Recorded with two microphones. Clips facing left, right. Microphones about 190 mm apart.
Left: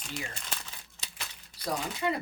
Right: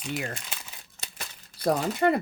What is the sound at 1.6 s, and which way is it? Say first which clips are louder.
Speech: right 9 dB; 55° right (ahead or behind).